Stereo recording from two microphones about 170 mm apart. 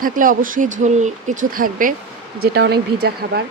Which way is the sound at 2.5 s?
70° right (ahead or behind).